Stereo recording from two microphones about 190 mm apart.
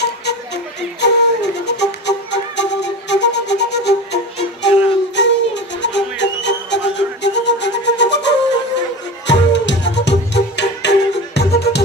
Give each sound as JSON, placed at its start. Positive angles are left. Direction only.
{"t": 1.0, "sound": "music", "side_deg": 65}